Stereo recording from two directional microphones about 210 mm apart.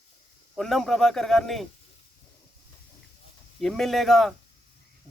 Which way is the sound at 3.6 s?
Centre (ahead or behind).